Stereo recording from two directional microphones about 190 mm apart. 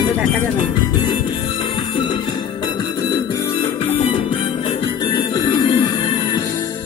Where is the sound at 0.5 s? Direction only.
20° left (ahead or behind).